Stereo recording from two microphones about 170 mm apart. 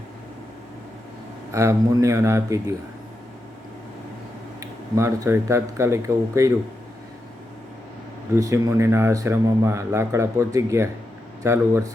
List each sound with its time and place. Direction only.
1.5 s speech: 15° right (ahead or behind)
4.6 s speech: 20° right (ahead or behind)
8.4 s speech: 20° right (ahead or behind)